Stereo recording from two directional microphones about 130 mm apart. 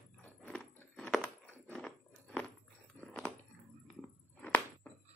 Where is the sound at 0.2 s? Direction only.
10° left (ahead or behind).